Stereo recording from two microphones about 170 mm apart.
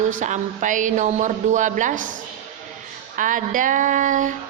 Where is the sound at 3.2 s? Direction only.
50° right (ahead or behind).